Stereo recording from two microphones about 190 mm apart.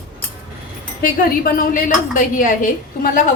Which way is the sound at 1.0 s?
50° left (ahead or behind).